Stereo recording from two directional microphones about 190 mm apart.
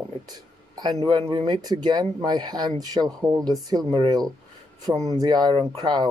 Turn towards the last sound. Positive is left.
turn(degrees=-20)  # may be behind; listen again after turning